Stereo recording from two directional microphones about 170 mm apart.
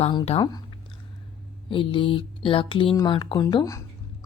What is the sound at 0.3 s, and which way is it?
Speech, 40° left (ahead or behind).